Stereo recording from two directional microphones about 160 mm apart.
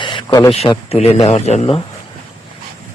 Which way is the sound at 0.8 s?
40° left (ahead or behind).